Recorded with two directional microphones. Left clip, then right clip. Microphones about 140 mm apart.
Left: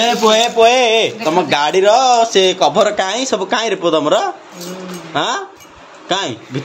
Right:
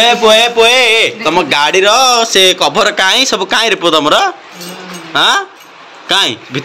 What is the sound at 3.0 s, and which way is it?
A man's voice, centre (ahead or behind).